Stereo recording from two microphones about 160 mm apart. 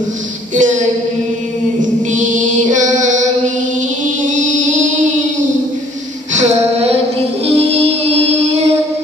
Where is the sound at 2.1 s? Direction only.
55° right (ahead or behind).